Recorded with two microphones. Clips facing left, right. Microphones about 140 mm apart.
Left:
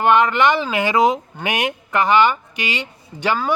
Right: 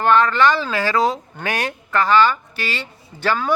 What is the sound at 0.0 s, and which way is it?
Speech, 15° left (ahead or behind).